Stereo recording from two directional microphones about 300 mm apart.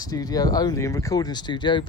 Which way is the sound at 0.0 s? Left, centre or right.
Centre.